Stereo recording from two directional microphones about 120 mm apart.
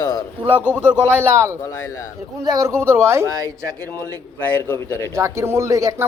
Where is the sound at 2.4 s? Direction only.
30° right (ahead or behind).